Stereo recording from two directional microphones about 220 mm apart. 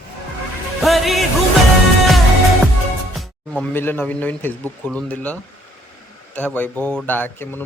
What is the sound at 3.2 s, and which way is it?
Speech, 5° left (ahead or behind).